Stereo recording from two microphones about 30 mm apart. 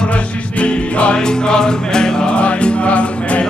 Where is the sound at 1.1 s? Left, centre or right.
Left.